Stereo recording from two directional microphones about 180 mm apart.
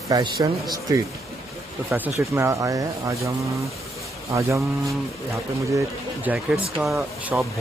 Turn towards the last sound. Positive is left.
turn(degrees=0)  # may be behind; listen again after turning